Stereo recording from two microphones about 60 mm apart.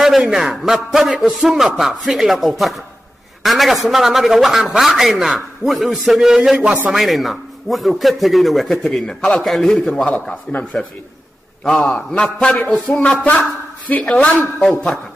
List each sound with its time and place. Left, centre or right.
0.0 s a man's voice: centre
6.5 s a man's voice: right
6.9 s a man's voice: centre
8.8 s a man's voice: centre
10.6 s a man's voice: left